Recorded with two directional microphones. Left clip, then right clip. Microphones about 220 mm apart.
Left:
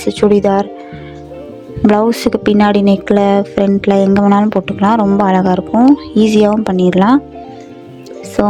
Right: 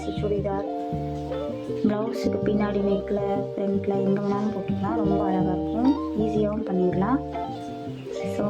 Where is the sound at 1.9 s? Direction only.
50° left (ahead or behind).